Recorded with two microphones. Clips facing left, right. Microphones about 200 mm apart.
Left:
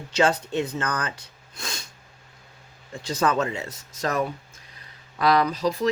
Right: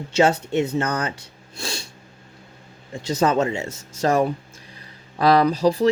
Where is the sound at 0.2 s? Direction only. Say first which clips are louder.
Right 4 dB; 25° right (ahead or behind).